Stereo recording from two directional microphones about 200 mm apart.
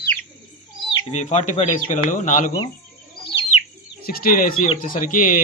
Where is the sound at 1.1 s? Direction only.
35° left (ahead or behind).